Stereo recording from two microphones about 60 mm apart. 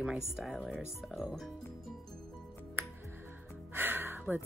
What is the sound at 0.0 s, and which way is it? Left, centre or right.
Speech, centre.